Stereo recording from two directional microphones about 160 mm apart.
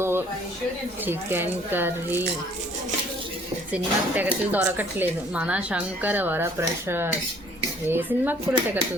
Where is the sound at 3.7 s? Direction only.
10° right (ahead or behind).